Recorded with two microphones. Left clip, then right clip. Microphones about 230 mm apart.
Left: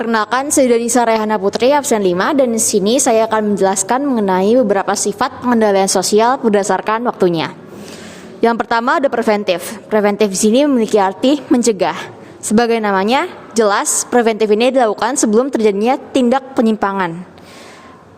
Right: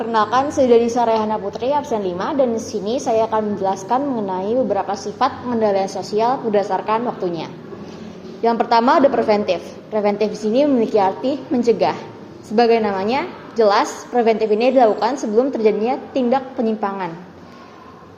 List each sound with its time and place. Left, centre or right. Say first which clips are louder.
0.0 s a woman's voice: left 1 dB; left